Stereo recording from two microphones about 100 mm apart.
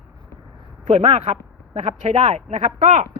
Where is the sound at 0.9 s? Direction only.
90° right.